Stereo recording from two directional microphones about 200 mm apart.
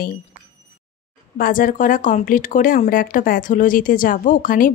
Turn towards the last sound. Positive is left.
turn(degrees=40)  # may be behind; listen again after turning